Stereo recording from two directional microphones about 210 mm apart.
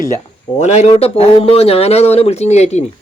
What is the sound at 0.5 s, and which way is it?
Speech, 35° left (ahead or behind).